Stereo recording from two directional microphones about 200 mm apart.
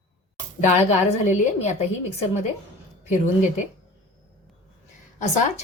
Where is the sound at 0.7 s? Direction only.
35° left (ahead or behind).